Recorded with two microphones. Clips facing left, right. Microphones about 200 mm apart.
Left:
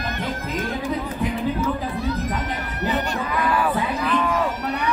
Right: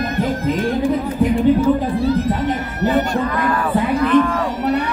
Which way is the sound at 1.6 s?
30° right (ahead or behind).